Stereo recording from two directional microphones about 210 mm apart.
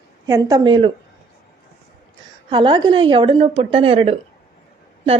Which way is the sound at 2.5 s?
20° right (ahead or behind).